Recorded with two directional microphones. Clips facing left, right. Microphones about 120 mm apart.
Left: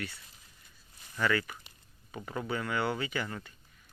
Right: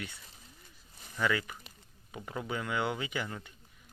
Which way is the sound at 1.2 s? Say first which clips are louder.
Left 1 dB; 10° right (ahead or behind).